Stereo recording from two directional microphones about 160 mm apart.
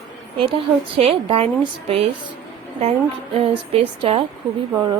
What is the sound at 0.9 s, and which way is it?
Speech, 35° right (ahead or behind).